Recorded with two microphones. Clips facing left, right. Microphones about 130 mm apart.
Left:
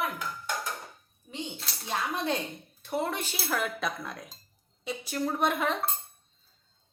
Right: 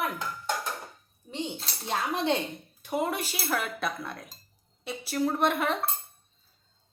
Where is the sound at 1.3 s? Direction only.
30° right (ahead or behind).